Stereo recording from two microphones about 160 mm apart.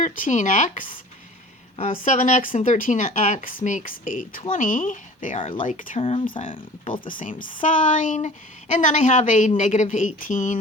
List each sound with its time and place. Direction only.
0.0 s speech: 50° left (ahead or behind)
5.4 s speech: 35° left (ahead or behind)
5.6 s speech: 55° left (ahead or behind)
6.0 s speech: 40° left (ahead or behind)
7.1 s speech: 55° left (ahead or behind)